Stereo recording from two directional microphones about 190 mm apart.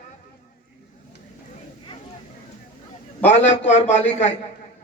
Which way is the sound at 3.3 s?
35° left (ahead or behind).